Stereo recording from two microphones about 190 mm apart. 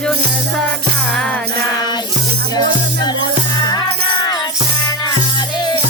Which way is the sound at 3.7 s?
20° left (ahead or behind).